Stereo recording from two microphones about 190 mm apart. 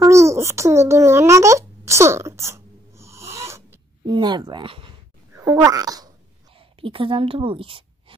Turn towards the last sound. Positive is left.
turn(degrees=-30)  # may be behind; listen again after turning